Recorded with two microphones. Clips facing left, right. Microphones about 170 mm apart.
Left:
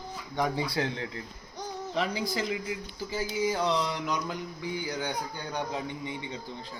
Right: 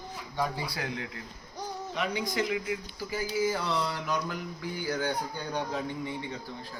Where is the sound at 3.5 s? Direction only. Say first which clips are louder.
Left 2 dB; 20° left (ahead or behind).